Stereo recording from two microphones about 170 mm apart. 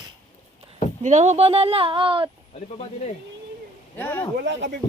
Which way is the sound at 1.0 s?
40° right (ahead or behind).